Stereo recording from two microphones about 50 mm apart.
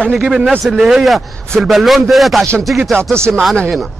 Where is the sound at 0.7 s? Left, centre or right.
Centre.